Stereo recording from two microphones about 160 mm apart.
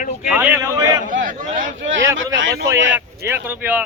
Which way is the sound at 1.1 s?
55° right (ahead or behind).